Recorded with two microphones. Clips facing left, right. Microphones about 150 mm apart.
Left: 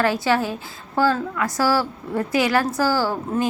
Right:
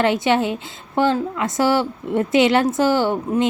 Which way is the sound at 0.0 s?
20° right (ahead or behind).